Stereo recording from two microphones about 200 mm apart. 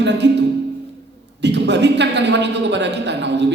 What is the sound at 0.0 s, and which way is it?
Music, 60° right (ahead or behind).